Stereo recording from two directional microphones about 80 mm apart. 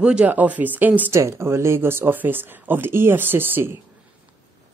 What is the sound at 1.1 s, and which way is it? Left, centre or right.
Speech, right.